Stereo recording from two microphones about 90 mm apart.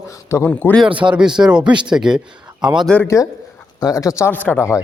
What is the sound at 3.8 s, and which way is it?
Speech, 40° left (ahead or behind).